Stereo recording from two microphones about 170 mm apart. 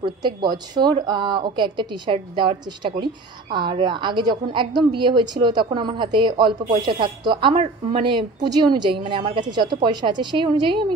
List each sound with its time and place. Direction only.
0.0 s speech: 25° right (ahead or behind)